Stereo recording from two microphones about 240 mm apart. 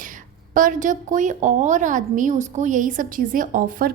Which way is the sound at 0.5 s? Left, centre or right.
Right.